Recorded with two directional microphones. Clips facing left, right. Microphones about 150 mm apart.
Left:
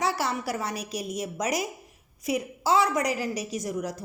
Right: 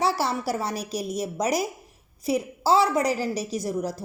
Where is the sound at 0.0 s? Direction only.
35° right (ahead or behind).